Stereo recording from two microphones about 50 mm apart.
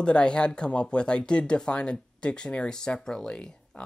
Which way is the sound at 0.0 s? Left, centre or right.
Centre.